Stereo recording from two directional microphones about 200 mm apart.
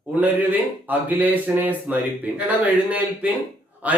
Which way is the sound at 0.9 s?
10° right (ahead or behind).